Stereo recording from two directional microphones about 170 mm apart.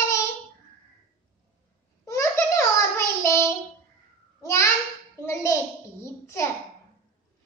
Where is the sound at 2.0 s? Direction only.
20° left (ahead or behind).